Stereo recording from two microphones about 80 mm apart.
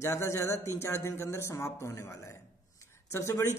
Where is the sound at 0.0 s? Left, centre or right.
Left.